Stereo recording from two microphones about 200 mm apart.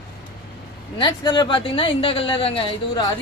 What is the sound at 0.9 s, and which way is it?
Speech, 20° left (ahead or behind).